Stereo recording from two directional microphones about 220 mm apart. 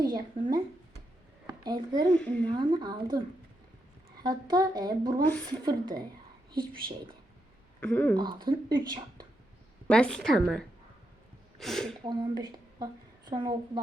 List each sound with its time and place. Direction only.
0.0 s speech: 20° right (ahead or behind)
2.0 s a woman's voice: 5° left (ahead or behind)
2.5 s a woman's voice: 20° right (ahead or behind)
7.8 s speech: 5° left (ahead or behind)
8.1 s speech: 20° right (ahead or behind)
9.8 s a woman's voice: 5° left (ahead or behind)
12.0 s speech: 20° right (ahead or behind)